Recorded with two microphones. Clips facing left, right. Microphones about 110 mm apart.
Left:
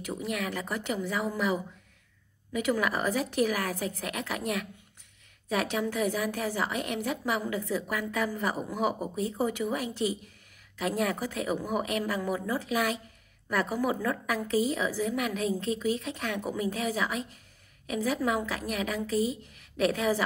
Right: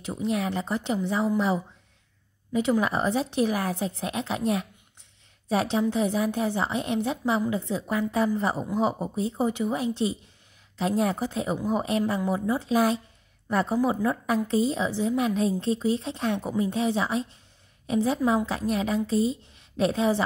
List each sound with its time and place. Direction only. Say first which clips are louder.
0.0 s a woman's voice: right 5 dB; 25° right (ahead or behind)